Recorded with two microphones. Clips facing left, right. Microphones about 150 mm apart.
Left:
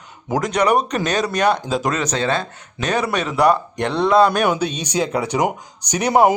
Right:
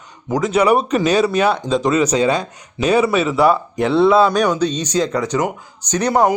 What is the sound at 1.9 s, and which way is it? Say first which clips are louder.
Speech: right 5 dB; 10° right (ahead or behind).